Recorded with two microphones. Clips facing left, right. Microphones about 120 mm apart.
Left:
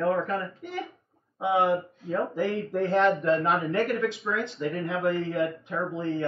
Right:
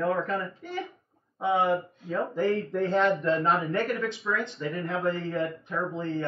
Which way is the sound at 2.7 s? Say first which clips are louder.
Left 1 dB; 70° left (ahead or behind).